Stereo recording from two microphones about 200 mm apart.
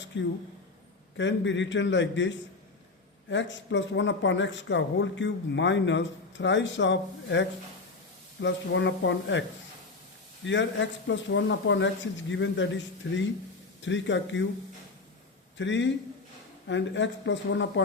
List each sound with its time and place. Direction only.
0.1 s speech: 60° left (ahead or behind)
10.4 s speech: 65° left (ahead or behind)
15.5 s speech: 65° left (ahead or behind)